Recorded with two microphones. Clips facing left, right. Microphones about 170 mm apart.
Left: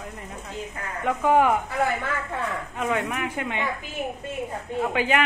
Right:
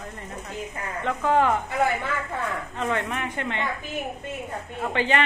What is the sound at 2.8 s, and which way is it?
Speech, 5° left (ahead or behind).